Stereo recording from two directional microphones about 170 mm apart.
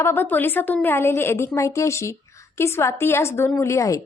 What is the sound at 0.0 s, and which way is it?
A woman's voice, 10° left (ahead or behind).